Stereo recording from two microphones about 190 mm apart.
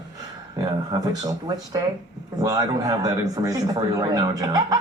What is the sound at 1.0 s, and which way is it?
A man's voice, 20° right (ahead or behind).